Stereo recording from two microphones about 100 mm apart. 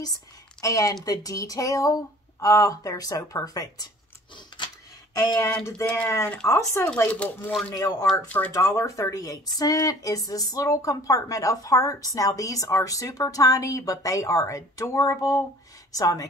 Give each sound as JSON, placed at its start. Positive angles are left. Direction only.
{"t": 0.0, "sound": "a woman's voice", "side_deg": 35}
{"t": 4.5, "sound": "a sound", "side_deg": 50}
{"t": 5.3, "sound": "speech", "side_deg": 30}
{"t": 7.1, "sound": "speech", "side_deg": 15}
{"t": 7.7, "sound": "speech", "side_deg": 35}